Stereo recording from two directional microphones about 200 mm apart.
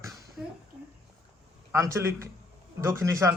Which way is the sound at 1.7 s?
15° right (ahead or behind).